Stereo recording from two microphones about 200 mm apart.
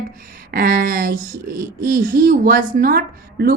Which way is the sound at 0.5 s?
45° right (ahead or behind).